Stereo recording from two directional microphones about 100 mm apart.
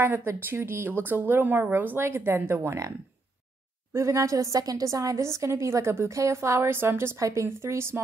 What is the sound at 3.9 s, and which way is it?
A woman's voice, 30° right (ahead or behind).